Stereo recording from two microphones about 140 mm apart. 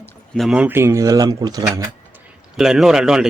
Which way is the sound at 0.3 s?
5° right (ahead or behind).